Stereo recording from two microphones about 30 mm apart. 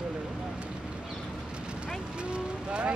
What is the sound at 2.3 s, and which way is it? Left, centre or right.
Speech, right.